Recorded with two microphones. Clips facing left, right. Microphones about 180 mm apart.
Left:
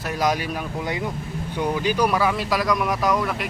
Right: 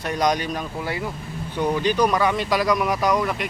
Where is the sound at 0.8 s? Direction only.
20° left (ahead or behind).